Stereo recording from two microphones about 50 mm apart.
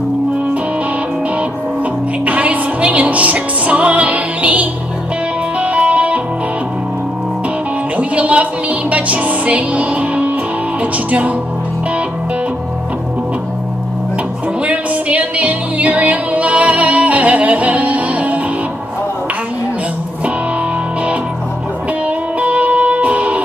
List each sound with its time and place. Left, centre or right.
2.2 s music: right
8.0 s music: right
14.6 s music: right
22.4 s music: right